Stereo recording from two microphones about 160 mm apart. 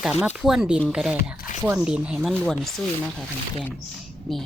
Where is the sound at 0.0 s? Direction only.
5° right (ahead or behind).